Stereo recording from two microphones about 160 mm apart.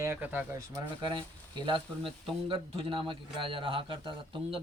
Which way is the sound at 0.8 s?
30° right (ahead or behind).